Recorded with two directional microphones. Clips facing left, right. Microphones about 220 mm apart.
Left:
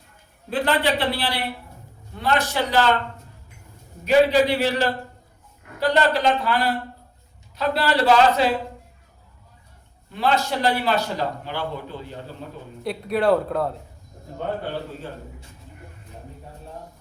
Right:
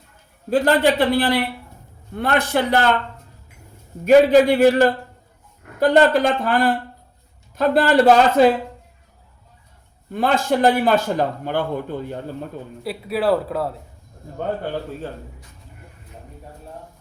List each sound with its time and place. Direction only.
0.5 s a man's voice: 45° right (ahead or behind)
4.0 s a man's voice: 50° right (ahead or behind)
10.1 s a man's voice: 50° right (ahead or behind)
12.8 s speech: 5° right (ahead or behind)